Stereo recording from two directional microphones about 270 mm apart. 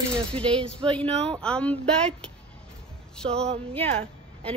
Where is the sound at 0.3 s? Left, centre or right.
Centre.